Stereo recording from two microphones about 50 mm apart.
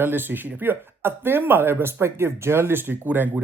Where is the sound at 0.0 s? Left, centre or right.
Right.